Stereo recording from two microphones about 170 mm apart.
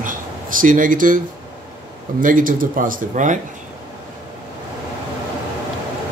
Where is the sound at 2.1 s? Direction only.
55° right (ahead or behind).